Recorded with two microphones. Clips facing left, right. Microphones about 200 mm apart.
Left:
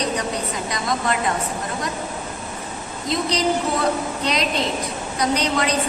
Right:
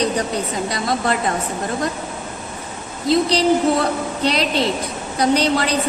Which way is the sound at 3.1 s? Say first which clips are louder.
Right 6 dB; 30° right (ahead or behind).